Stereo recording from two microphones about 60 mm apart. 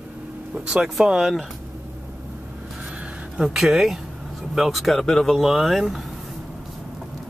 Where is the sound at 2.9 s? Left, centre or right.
Centre.